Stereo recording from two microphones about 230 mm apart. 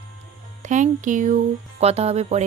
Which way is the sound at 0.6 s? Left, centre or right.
Right.